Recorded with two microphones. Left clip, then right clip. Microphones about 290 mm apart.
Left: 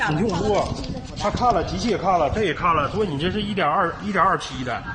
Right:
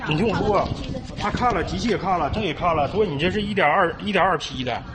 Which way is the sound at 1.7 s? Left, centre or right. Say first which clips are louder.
Left 2 dB; centre.